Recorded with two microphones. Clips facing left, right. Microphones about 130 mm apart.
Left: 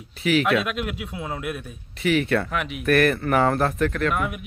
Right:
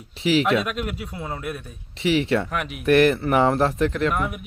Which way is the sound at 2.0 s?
25° right (ahead or behind).